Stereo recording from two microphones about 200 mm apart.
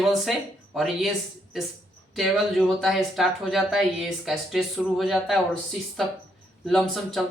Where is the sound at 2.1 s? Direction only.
Centre (ahead or behind).